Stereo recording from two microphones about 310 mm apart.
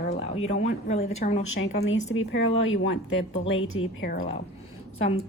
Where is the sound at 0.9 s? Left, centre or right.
Left.